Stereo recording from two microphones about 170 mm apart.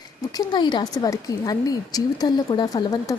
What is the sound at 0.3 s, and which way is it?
A woman's voice, 25° left (ahead or behind).